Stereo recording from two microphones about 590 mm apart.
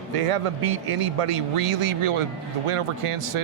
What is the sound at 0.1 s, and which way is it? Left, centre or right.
Speech, right.